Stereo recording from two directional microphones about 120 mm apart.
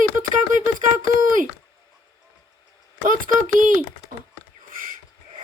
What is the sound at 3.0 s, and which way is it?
Speech, 90° right.